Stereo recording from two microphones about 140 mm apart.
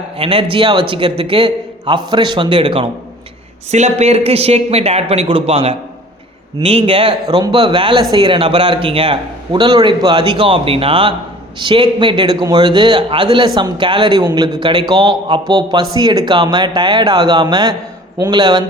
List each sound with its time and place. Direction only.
0.2 s a man's voice: 40° right (ahead or behind)
3.7 s a man's voice: 55° right (ahead or behind); by 18.6 s 35° right (ahead or behind)